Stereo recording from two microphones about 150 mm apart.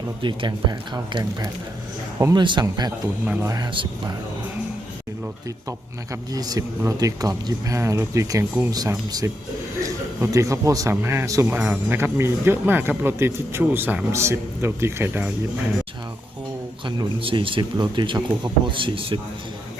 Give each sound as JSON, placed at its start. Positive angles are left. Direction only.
{"t": 0.2, "sound": "a man's voice", "side_deg": -30}
{"t": 3.2, "sound": "speech", "side_deg": -10}
{"t": 3.5, "sound": "speech", "side_deg": -25}
{"t": 6.3, "sound": "speech", "side_deg": -25}
{"t": 16.8, "sound": "speech", "side_deg": -35}